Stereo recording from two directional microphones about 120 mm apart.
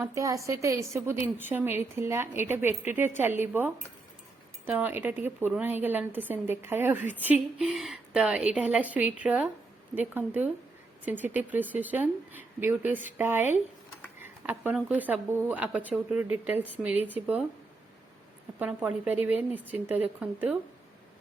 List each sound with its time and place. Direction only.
0.0 s a woman's voice: 25° right (ahead or behind)
18.6 s speech: 15° right (ahead or behind)